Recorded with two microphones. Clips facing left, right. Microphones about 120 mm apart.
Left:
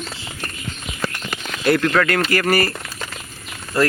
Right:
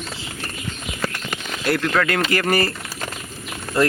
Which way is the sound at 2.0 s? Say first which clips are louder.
Left 2 dB; 20° right (ahead or behind).